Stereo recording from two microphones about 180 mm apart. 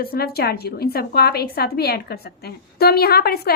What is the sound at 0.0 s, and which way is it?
A woman's voice, 60° left (ahead or behind).